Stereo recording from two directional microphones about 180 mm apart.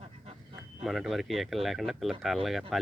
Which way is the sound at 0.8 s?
Centre (ahead or behind).